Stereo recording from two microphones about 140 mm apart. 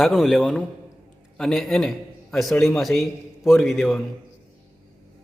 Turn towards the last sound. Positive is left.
turn(degrees=0)  # may be behind; listen again after turning